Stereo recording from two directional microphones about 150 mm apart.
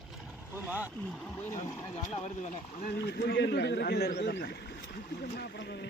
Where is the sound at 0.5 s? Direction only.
10° right (ahead or behind).